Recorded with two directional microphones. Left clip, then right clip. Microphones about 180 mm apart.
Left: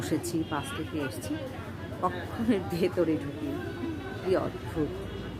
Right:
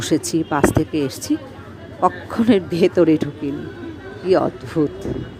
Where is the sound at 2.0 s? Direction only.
45° right (ahead or behind).